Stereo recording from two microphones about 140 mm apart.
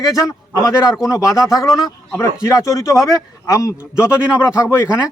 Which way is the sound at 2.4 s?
20° left (ahead or behind).